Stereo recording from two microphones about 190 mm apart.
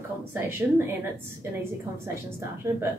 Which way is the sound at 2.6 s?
15° right (ahead or behind).